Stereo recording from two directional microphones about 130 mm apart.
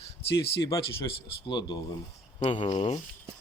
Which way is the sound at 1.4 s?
35° left (ahead or behind).